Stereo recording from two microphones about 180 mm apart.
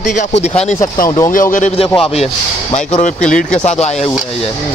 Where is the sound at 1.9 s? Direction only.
35° left (ahead or behind).